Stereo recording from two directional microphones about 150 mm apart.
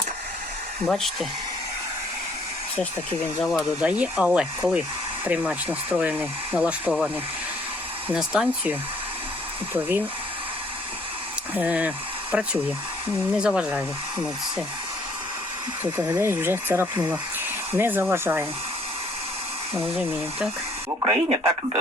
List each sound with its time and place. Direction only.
0.9 s speech: centre (ahead or behind)
3.4 s speech: 5° left (ahead or behind)
3.8 s speech: 10° right (ahead or behind)
11.5 s speech: 10° right (ahead or behind)
15.8 s speech: 15° right (ahead or behind)
21.0 s speech: 40° right (ahead or behind)